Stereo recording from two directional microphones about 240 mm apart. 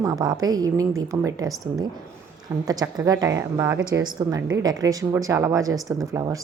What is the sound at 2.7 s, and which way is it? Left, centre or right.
Speech, centre.